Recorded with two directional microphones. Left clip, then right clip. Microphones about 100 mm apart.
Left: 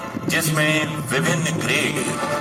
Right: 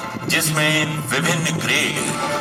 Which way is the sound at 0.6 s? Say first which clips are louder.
Right 1 dB; 35° left (ahead or behind).